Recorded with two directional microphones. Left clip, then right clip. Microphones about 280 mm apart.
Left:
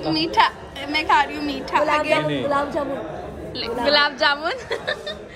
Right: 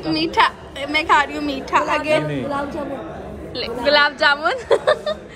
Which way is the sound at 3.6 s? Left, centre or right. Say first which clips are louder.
Right 2 dB; centre.